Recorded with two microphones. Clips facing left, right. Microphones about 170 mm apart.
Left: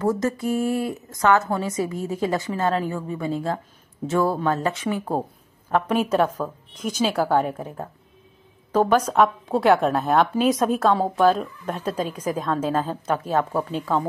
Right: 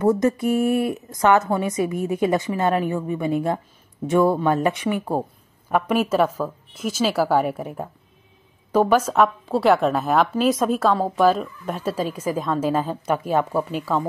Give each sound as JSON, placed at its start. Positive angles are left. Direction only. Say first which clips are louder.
{"t": 0.2, "sound": "a woman's voice", "louder": "right 4 dB", "side_deg": -20}